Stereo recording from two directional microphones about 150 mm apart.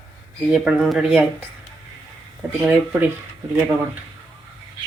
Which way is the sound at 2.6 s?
10° right (ahead or behind).